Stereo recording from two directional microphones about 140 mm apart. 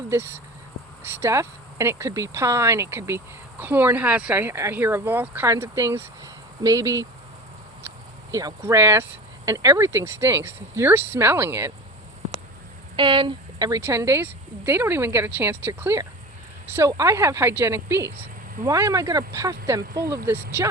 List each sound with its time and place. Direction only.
0.1 s speech: 15° right (ahead or behind)
13.0 s speech: 35° right (ahead or behind); by 20.7 s 15° right (ahead or behind)